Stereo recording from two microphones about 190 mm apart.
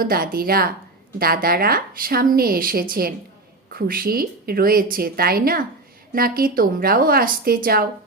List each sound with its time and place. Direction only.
0.0 s a woman's voice: 50° right (ahead or behind)